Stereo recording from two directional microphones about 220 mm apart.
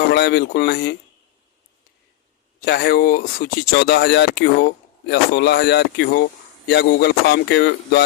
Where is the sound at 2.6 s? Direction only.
45° left (ahead or behind).